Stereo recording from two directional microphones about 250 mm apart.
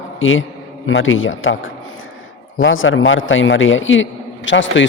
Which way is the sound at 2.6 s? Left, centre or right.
Left.